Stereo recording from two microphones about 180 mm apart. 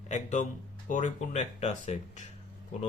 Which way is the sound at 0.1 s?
40° left (ahead or behind).